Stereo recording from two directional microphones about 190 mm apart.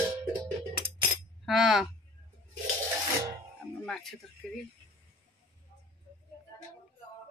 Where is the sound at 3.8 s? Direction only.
Centre (ahead or behind).